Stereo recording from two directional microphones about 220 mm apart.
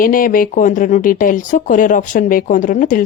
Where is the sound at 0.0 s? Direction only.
40° left (ahead or behind).